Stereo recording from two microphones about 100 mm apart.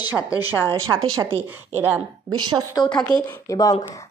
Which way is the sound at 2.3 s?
45° right (ahead or behind).